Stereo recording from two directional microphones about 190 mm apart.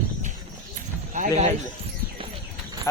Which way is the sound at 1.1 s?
40° right (ahead or behind).